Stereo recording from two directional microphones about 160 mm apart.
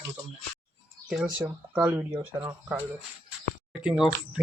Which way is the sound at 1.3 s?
15° right (ahead or behind).